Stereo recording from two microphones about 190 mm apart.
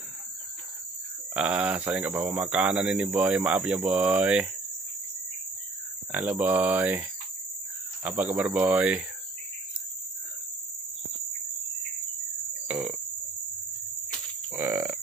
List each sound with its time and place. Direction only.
1.3 s speech: 5° right (ahead or behind)
6.1 s speech: 10° right (ahead or behind)
12.6 s burping: 10° right (ahead or behind)
14.5 s burping: 10° right (ahead or behind)